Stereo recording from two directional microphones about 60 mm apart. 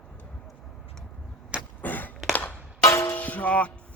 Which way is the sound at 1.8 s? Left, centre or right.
Left.